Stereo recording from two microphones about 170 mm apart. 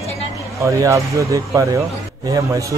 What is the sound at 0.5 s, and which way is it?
A man's voice, 20° right (ahead or behind).